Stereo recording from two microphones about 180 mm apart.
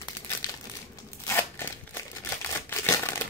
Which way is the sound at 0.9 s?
15° left (ahead or behind).